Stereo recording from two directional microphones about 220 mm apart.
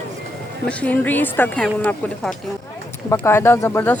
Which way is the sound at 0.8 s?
5° left (ahead or behind).